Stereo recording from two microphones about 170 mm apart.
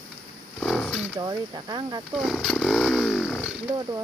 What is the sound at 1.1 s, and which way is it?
Speech, 25° right (ahead or behind).